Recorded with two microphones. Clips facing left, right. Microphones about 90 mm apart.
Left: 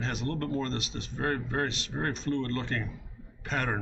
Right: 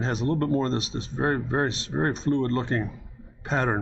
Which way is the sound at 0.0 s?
35° right (ahead or behind).